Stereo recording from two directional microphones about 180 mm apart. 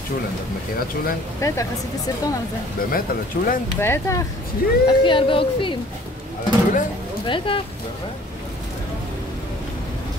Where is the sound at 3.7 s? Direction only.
15° left (ahead or behind).